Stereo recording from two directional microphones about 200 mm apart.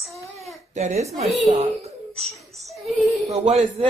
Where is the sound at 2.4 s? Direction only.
Centre (ahead or behind).